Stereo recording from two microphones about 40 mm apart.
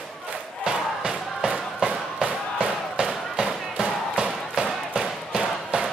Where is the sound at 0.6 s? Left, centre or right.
Centre.